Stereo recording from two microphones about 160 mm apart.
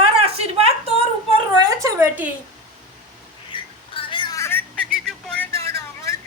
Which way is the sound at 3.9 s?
30° left (ahead or behind).